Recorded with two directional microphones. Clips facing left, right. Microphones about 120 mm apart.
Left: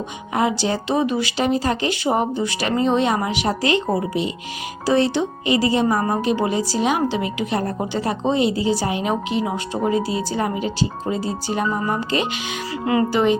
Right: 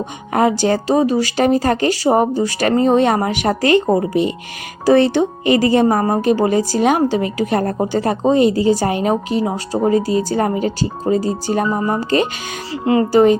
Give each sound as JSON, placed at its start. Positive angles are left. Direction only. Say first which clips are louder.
{"t": 0.3, "sound": "speech", "louder": "right 5 dB", "side_deg": -50}
{"t": 9.9, "sound": "speech", "louder": "right 5 dB", "side_deg": -45}
{"t": 12.7, "sound": "speech", "louder": "right 6 dB", "side_deg": -30}